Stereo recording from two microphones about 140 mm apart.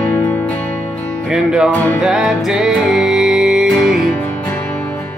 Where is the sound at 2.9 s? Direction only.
5° right (ahead or behind).